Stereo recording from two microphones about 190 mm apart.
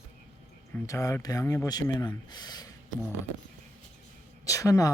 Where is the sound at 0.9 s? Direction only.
15° left (ahead or behind).